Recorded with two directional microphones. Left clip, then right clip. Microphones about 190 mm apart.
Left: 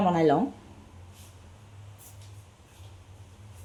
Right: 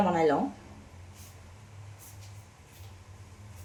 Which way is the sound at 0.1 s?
30° left (ahead or behind).